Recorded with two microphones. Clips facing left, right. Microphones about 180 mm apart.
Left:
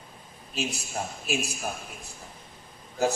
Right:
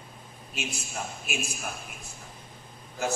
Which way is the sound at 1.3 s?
35° left (ahead or behind).